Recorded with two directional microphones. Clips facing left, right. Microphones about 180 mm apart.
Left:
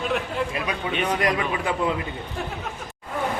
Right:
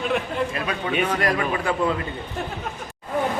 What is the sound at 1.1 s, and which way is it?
Speech, 20° left (ahead or behind).